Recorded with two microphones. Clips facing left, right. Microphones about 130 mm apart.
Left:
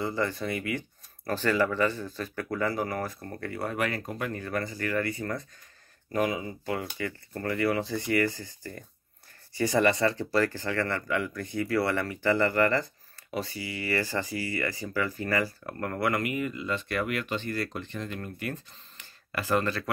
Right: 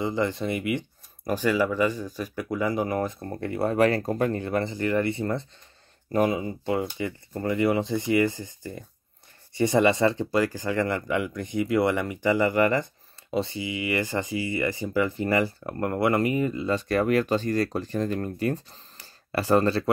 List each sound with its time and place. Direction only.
0.0 s speech: 20° right (ahead or behind)